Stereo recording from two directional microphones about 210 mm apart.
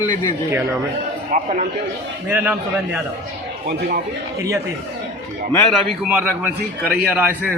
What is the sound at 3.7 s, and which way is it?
Speech, 40° right (ahead or behind).